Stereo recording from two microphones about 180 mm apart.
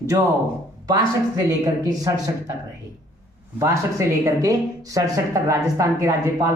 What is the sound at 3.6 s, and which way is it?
Speech, 15° right (ahead or behind).